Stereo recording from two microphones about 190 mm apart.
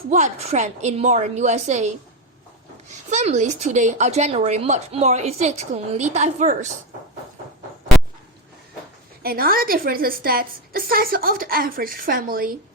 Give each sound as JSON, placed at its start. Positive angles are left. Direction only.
{"t": 0.1, "sound": "a woman's voice", "side_deg": -35}
{"t": 3.1, "sound": "a woman's voice", "side_deg": -40}
{"t": 9.2, "sound": "a woman's voice", "side_deg": -50}